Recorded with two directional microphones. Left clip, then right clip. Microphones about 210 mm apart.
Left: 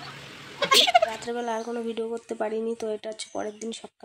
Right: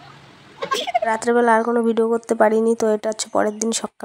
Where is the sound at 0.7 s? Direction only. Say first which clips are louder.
Left 4 dB; 10° right (ahead or behind).